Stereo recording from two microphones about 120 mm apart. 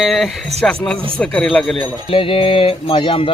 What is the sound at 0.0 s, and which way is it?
A man's voice, centre (ahead or behind).